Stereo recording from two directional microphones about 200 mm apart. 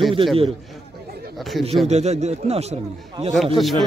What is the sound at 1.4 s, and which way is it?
Speech, centre (ahead or behind).